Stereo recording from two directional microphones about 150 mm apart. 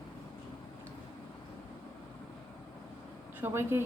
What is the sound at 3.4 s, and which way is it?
Speech, 15° right (ahead or behind).